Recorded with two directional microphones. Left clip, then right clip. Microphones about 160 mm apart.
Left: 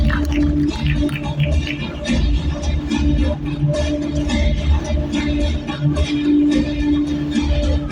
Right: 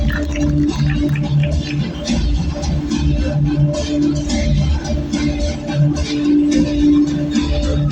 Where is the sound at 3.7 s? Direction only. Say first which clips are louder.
Right 1 dB; 20° left (ahead or behind).